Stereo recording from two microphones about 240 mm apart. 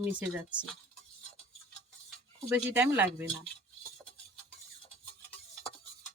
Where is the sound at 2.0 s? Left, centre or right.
Centre.